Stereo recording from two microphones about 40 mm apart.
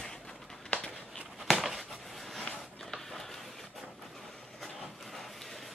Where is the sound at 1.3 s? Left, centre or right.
Centre.